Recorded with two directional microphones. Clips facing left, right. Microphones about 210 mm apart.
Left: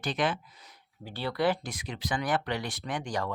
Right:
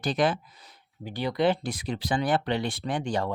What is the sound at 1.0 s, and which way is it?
Speech, 15° right (ahead or behind).